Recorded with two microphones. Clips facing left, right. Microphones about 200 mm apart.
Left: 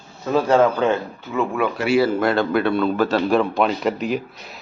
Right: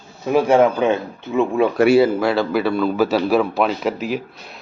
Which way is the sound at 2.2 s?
Centre (ahead or behind).